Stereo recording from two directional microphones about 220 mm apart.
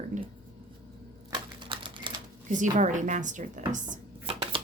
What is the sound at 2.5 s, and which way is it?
Speech, 35° right (ahead or behind).